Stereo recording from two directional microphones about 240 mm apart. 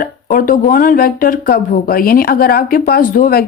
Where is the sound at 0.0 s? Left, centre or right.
Left.